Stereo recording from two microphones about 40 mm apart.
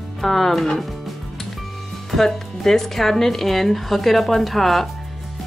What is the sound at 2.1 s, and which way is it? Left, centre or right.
Speech, centre.